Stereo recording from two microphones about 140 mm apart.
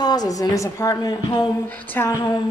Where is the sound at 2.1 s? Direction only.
25° left (ahead or behind).